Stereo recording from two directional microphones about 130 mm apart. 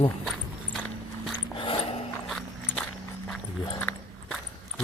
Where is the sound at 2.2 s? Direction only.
Centre (ahead or behind).